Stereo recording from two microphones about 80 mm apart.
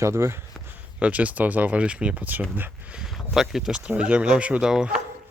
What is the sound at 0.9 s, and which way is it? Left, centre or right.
Speech, centre.